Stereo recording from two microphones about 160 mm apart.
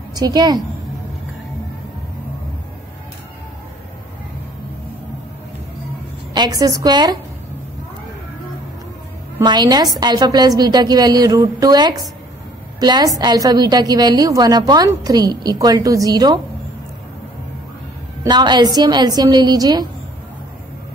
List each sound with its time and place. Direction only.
0.1 s a woman's voice: 25° right (ahead or behind)
6.3 s a woman's voice: 25° right (ahead or behind)
9.4 s a woman's voice: 25° right (ahead or behind)
18.2 s a woman's voice: 25° right (ahead or behind)